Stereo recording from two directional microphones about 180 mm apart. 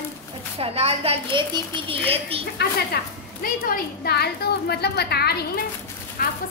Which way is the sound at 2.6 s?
65° left (ahead or behind).